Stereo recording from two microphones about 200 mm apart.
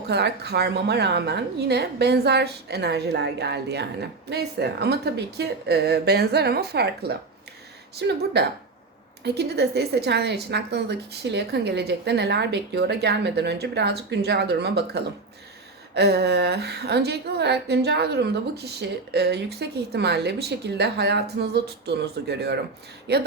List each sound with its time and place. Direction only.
0.1 s a woman's voice: 55° right (ahead or behind)